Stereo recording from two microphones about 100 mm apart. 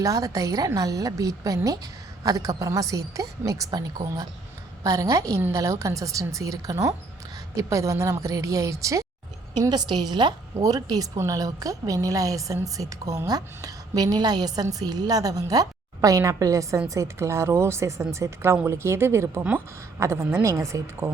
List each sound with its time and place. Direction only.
0.0 s a woman's voice: 35° right (ahead or behind)
9.6 s a woman's voice: 45° right (ahead or behind)